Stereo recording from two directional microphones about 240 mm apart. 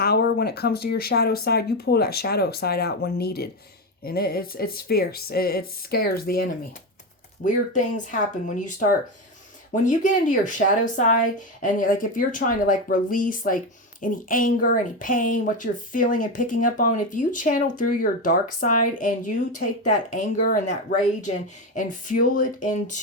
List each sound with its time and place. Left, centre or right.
0.0 s speech: left
21.8 s speech: left